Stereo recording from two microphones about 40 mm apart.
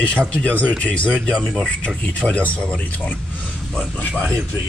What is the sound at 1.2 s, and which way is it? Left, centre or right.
Speech, centre.